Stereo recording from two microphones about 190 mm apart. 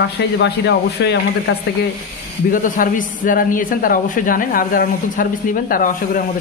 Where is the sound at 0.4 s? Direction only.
65° left (ahead or behind).